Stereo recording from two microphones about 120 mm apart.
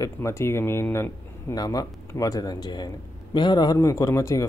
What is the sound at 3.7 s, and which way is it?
Speech, 25° left (ahead or behind).